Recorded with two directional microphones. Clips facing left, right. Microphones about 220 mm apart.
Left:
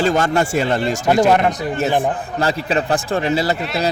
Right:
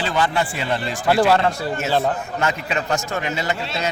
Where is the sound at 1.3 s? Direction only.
20° left (ahead or behind).